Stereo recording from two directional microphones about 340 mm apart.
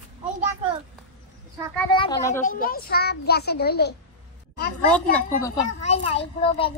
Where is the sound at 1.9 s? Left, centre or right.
Centre.